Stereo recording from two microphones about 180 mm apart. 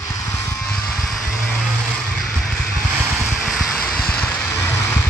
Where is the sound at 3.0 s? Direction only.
10° right (ahead or behind); by 5.0 s 15° left (ahead or behind).